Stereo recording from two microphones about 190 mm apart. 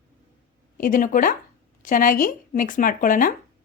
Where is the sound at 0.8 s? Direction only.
45° left (ahead or behind).